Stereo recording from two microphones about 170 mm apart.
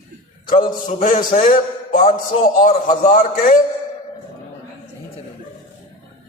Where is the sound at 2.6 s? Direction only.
50° left (ahead or behind).